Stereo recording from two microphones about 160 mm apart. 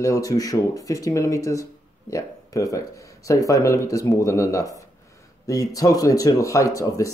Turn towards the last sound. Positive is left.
turn(degrees=20)  # may be behind; listen again after turning